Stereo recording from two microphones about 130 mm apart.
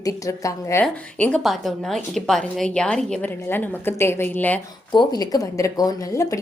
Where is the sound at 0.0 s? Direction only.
25° left (ahead or behind).